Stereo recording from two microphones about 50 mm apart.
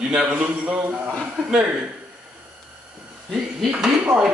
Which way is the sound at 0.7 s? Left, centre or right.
Right.